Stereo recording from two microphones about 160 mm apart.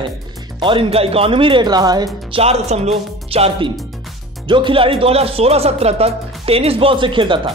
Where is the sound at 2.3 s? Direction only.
40° right (ahead or behind).